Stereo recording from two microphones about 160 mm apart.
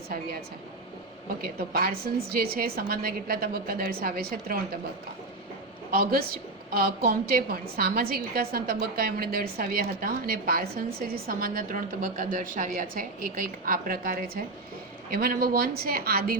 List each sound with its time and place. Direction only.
1.4 s a woman's voice: 70° right (ahead or behind)
5.9 s a woman's voice: 75° right (ahead or behind)